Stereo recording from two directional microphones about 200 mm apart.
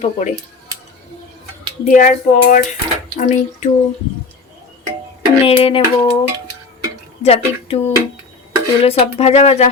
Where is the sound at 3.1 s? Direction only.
40° left (ahead or behind).